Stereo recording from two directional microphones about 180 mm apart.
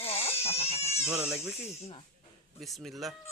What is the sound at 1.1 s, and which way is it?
Speech, 5° right (ahead or behind).